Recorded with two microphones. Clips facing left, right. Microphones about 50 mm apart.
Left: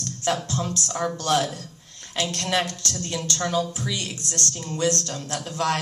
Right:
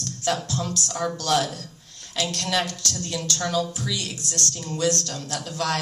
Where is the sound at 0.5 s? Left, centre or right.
Left.